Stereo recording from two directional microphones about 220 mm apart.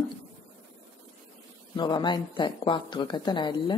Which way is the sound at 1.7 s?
20° left (ahead or behind).